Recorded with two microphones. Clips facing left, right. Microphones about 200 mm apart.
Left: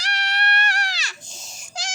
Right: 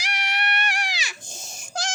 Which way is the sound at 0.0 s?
10° right (ahead or behind).